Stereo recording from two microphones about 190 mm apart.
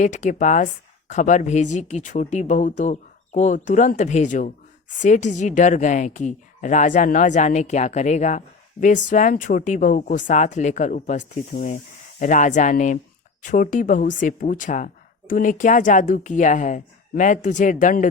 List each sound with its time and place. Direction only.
0.0 s a woman's voice: 40° left (ahead or behind)